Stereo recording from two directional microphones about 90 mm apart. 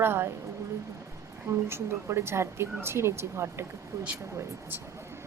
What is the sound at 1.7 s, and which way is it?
A woman's voice, 30° right (ahead or behind).